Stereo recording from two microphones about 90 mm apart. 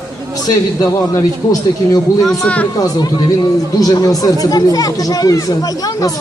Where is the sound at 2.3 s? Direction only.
10° left (ahead or behind).